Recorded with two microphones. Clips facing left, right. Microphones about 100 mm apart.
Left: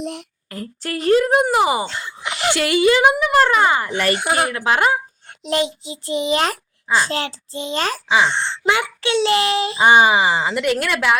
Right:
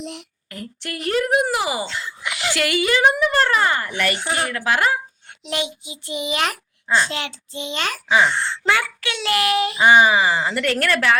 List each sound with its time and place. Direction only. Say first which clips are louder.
0.0 s speech: left 5 dB; 45° left (ahead or behind); by 1.8 s 25° left (ahead or behind)
1.8 s speech: left 2 dB; 45° left (ahead or behind)
2.5 s speech: left 5 dB; 30° left (ahead or behind)
3.0 s speech: left 3 dB; 15° left (ahead or behind)
4.1 s speech: left 5 dB; 60° left (ahead or behind)
4.4 s speech: right 1 dB; 25° left (ahead or behind)
5.5 s speech: left 6 dB; 35° left (ahead or behind)
8.3 s speech: left 1 dB; 25° left (ahead or behind)